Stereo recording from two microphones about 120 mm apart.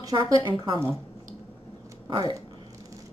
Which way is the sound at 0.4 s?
40° right (ahead or behind).